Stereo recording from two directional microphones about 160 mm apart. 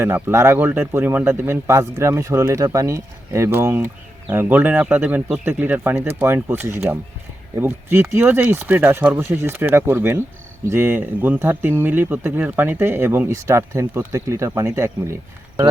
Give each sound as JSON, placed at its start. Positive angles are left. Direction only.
{"t": 0.0, "sound": "speech", "side_deg": -15}